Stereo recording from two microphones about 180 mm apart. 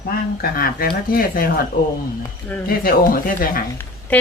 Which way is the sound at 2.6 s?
55° left (ahead or behind).